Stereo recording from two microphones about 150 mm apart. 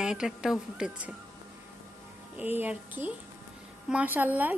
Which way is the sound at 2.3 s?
10° right (ahead or behind).